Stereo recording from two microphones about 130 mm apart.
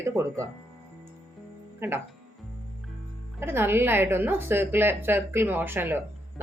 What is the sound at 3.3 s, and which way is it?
A woman's voice, 15° right (ahead or behind).